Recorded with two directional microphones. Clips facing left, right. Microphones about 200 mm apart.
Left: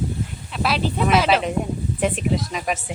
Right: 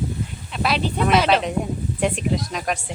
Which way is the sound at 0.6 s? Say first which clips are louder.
Even; centre (ahead or behind).